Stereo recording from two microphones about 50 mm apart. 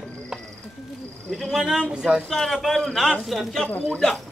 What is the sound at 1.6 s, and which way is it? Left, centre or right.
Speech, centre.